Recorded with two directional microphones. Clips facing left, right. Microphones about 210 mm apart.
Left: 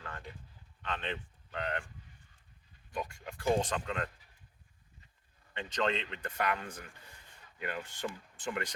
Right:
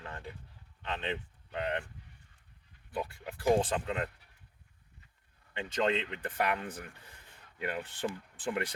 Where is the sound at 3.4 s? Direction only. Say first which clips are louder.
Right 3 dB; 30° right (ahead or behind).